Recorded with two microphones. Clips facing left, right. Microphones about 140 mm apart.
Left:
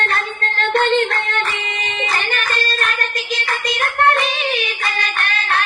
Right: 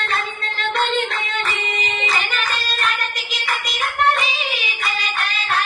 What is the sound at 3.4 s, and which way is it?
Child singing, 65° left (ahead or behind).